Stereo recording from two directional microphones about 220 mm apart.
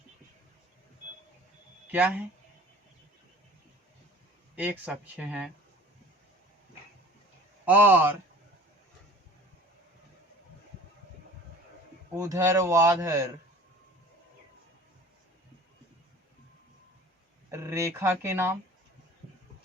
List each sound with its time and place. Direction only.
1.9 s a man's voice: 10° right (ahead or behind)
4.5 s speech: 5° right (ahead or behind)
7.6 s a man's voice: 10° right (ahead or behind)
12.1 s a man's voice: 15° right (ahead or behind)
17.5 s a man's voice: 15° right (ahead or behind)